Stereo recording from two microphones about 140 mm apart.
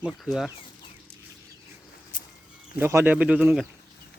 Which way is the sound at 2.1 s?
70° left (ahead or behind).